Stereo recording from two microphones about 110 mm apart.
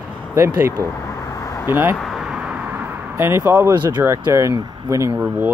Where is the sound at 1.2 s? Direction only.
30° left (ahead or behind).